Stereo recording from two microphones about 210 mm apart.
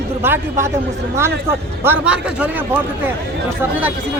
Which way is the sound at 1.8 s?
5° right (ahead or behind).